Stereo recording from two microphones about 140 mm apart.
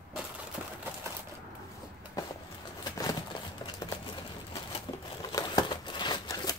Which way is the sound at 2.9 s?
25° left (ahead or behind).